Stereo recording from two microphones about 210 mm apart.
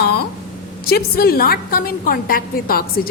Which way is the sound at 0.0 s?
50° left (ahead or behind).